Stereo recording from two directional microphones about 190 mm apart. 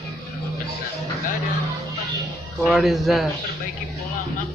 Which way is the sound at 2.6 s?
Centre (ahead or behind).